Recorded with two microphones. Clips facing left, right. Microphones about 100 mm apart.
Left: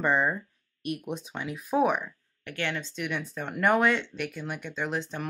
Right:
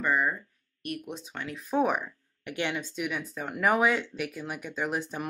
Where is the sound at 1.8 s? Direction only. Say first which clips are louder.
Left 1 dB; centre (ahead or behind).